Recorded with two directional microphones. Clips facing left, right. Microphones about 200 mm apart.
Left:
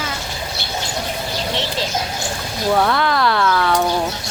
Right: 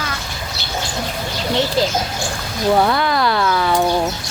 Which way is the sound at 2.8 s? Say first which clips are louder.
Left 1 dB; 5° right (ahead or behind).